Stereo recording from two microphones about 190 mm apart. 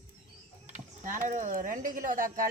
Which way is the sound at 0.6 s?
40° right (ahead or behind).